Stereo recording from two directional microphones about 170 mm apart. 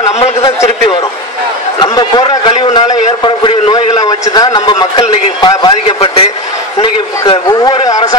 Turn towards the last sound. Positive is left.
turn(degrees=25)  # may be behind; listen again after turning